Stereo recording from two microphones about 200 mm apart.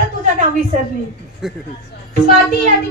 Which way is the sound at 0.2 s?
35° right (ahead or behind).